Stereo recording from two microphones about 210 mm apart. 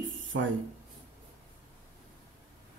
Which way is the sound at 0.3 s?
70° right (ahead or behind).